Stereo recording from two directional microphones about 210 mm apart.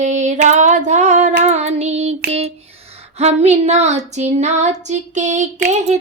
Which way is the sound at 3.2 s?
30° right (ahead or behind).